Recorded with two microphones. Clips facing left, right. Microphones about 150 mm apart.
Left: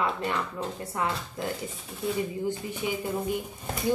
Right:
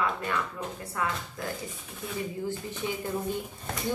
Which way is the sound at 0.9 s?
25° left (ahead or behind).